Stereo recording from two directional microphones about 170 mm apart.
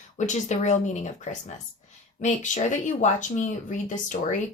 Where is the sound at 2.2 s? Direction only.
45° left (ahead or behind).